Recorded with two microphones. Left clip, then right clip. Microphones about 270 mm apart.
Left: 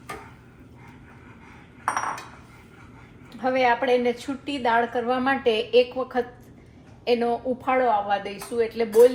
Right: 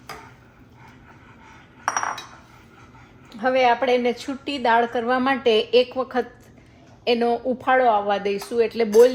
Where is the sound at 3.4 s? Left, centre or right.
Right.